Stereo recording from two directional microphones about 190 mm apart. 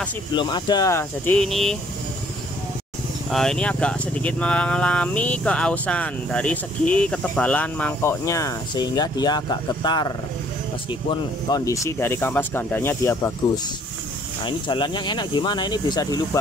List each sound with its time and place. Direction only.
0.3 s speech: 25° left (ahead or behind); by 1.8 s centre (ahead or behind)
3.3 s speech: centre (ahead or behind)
14.4 s speech: 25° left (ahead or behind)